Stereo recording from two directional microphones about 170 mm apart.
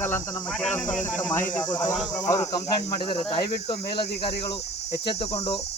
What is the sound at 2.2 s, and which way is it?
Cricket, 20° left (ahead or behind).